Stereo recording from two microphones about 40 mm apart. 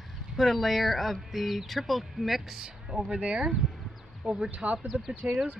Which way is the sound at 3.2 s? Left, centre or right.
Right.